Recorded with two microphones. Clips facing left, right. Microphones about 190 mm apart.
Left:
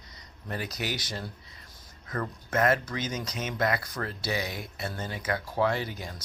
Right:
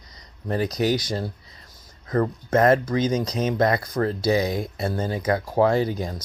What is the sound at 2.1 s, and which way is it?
Speech, 35° right (ahead or behind).